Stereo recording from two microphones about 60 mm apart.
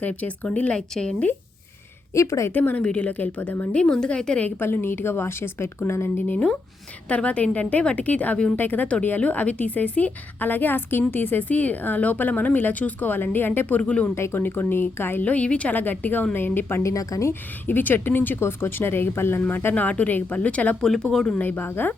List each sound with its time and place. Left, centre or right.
0.0 s a woman's voice: left
0.8 s a woman's voice: centre
2.1 s a woman's voice: left
2.5 s a woman's voice: left
3.8 s a woman's voice: centre
4.6 s speech: left
6.2 s a woman's voice: left
14.2 s speech: left
15.2 s a woman's voice: left
15.7 s speech: left
16.8 s a woman's voice: left
17.7 s speech: left
20.8 s a woman's voice: centre
21.4 s speech: left